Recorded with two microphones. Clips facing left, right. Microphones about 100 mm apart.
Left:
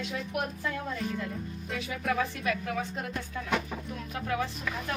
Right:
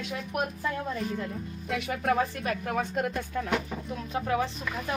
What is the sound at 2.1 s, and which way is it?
A woman's voice, 35° right (ahead or behind).